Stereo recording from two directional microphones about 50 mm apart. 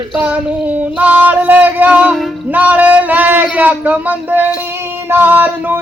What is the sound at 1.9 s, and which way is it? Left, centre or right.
Speech, right.